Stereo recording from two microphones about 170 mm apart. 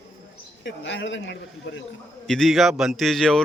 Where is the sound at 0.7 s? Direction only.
90° left.